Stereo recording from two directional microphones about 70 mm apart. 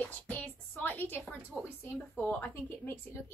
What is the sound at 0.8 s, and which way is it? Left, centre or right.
A woman's voice, left.